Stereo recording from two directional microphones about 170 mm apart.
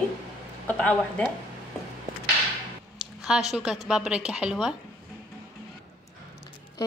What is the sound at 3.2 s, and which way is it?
A woman's voice, 5° right (ahead or behind).